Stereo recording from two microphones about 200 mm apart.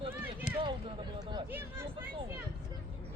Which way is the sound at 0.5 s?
35° left (ahead or behind).